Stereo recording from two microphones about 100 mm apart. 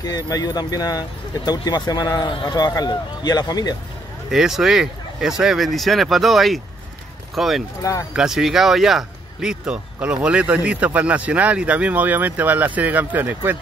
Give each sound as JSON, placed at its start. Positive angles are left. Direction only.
{"t": 0.0, "sound": "speech", "side_deg": 40}
{"t": 4.3, "sound": "speech", "side_deg": -5}